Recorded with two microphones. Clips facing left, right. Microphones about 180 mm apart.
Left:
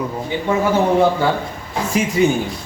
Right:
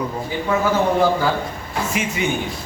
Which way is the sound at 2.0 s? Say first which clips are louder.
Left 7 dB; 35° left (ahead or behind).